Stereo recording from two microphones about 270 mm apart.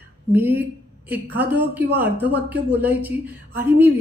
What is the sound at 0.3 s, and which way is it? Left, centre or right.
A woman's voice, centre.